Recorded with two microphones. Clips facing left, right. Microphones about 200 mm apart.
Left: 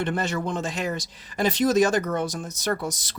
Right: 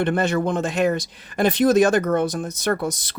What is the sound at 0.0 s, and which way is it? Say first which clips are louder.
Speech: right 6 dB; 60° right (ahead or behind).